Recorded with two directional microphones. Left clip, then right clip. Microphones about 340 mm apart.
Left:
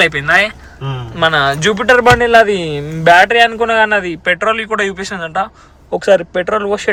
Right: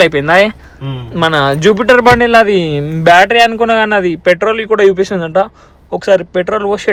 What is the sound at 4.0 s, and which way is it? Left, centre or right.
Speech, centre.